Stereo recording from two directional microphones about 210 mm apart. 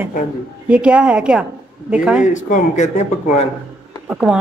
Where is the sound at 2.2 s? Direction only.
35° left (ahead or behind).